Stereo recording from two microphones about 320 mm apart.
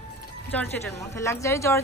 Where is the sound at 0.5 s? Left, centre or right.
Centre.